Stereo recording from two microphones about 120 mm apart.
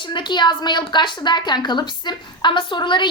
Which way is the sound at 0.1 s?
40° left (ahead or behind).